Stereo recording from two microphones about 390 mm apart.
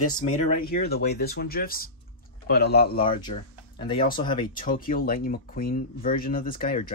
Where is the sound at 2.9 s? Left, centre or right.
Centre.